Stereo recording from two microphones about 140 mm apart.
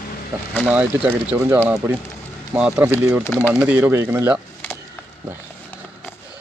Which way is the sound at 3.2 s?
15° left (ahead or behind).